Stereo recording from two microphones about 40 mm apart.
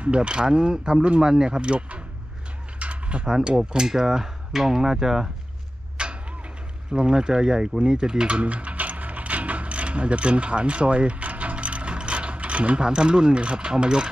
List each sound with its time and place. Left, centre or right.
0.0 s speech: right
1.6 s speech: right
2.8 s a sound: right
3.4 s speech: centre
6.0 s a sound: right
6.9 s speech: right
7.8 s mechanisms: right
12.8 s speech: right